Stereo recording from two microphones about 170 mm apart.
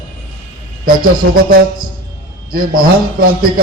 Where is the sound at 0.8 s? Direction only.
60° right (ahead or behind).